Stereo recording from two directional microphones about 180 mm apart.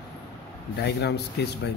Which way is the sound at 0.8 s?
70° left (ahead or behind).